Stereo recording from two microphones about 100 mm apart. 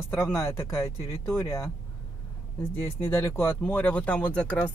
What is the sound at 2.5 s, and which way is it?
Speech, 20° left (ahead or behind).